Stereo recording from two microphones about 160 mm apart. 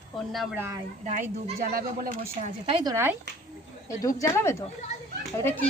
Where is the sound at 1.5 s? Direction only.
65° right (ahead or behind).